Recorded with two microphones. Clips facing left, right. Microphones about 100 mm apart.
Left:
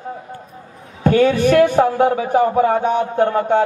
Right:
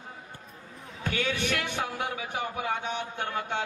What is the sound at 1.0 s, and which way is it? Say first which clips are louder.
A man's voice: left 17 dB; 40° left (ahead or behind).